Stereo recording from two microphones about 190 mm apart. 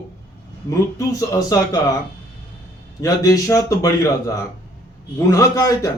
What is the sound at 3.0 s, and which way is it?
A man's voice, 20° left (ahead or behind).